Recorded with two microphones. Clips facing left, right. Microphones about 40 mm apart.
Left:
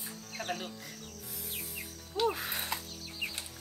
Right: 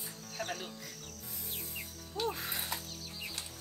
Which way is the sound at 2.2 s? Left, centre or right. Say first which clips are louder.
Left 5 dB; left.